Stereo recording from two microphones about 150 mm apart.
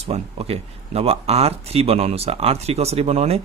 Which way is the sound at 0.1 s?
40° right (ahead or behind).